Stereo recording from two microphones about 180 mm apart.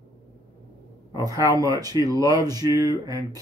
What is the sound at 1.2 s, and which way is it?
Speech, 20° right (ahead or behind).